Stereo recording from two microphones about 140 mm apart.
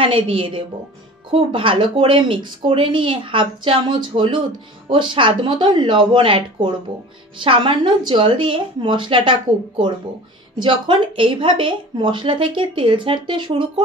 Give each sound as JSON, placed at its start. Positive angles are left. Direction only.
{"t": 0.0, "sound": "speech", "side_deg": -40}